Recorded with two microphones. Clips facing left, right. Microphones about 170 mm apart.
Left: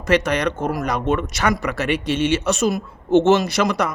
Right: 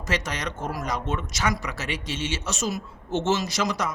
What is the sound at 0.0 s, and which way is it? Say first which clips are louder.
A man's voice: left 11 dB; 60° left (ahead or behind).